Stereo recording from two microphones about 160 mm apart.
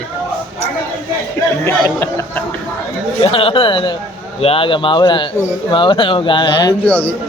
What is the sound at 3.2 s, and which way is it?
Speech, 35° left (ahead or behind).